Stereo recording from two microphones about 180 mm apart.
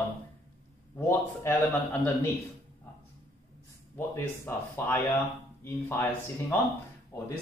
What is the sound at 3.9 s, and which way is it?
Speech, 15° left (ahead or behind).